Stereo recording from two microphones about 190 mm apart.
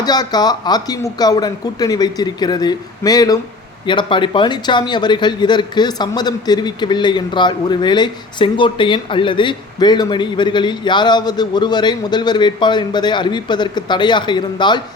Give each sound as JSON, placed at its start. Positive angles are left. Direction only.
{"t": 0.0, "sound": "speech", "side_deg": 20}